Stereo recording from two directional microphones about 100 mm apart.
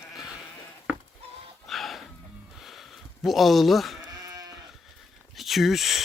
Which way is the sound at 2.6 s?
Centre (ahead or behind).